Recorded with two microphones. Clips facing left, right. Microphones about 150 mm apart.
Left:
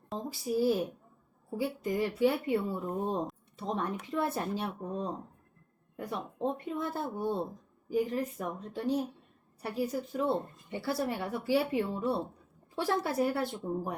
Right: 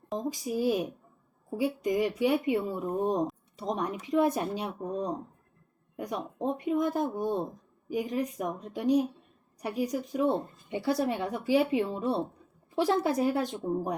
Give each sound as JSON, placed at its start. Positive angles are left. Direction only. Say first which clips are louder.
{"t": 0.2, "sound": "a woman's voice", "louder": "left 1 dB", "side_deg": -15}